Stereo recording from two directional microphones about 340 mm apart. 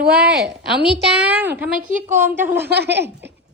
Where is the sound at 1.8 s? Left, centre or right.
Right.